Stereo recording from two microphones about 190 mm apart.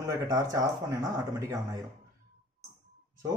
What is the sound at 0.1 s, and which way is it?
Speech, 15° right (ahead or behind).